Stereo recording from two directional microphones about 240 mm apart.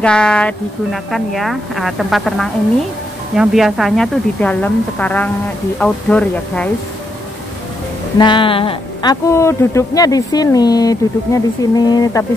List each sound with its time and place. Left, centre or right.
0.0 s a woman's voice: centre
8.2 s speech: centre